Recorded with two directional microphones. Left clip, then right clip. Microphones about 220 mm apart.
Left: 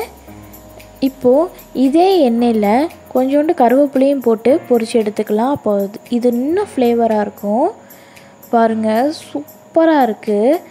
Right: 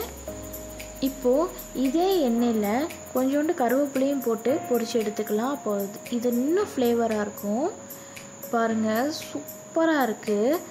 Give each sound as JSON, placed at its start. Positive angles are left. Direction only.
{"t": 1.0, "sound": "a child's voice", "side_deg": 30}